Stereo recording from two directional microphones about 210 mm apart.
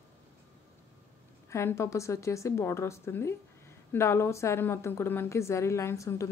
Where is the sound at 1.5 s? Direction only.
15° left (ahead or behind).